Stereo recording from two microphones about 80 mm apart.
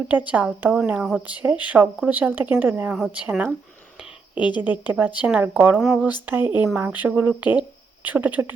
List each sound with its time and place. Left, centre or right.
0.1 s a woman's voice: centre
4.4 s speech: left
4.6 s a woman's voice: right